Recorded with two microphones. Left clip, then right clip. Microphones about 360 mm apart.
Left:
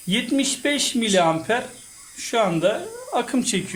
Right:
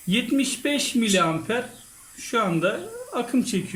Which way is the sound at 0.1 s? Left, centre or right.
Centre.